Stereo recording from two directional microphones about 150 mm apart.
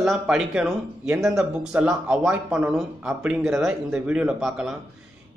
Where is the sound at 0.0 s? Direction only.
5° right (ahead or behind).